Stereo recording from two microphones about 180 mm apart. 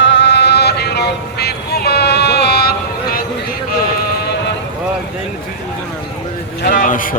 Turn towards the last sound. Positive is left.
turn(degrees=50)  # may be behind; listen again after turning